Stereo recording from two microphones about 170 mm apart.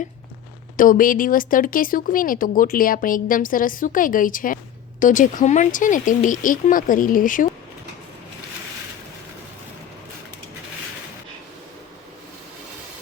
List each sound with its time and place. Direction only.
0.8 s speech: 55° left (ahead or behind)